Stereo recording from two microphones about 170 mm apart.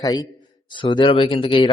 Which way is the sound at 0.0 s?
20° left (ahead or behind).